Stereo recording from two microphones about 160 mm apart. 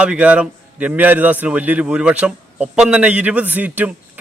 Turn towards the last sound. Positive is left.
turn(degrees=-10)  # may be behind; listen again after turning